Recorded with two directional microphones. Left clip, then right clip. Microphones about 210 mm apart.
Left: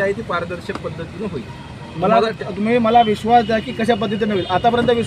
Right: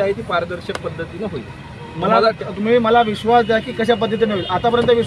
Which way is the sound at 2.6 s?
25° right (ahead or behind).